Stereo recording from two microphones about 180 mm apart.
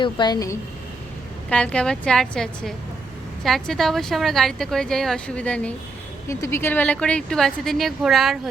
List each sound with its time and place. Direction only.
0.0 s a woman's voice: 25° left (ahead or behind)
1.5 s a woman's voice: 5° left (ahead or behind)